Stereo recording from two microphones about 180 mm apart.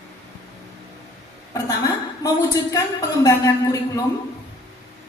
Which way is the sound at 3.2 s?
20° left (ahead or behind).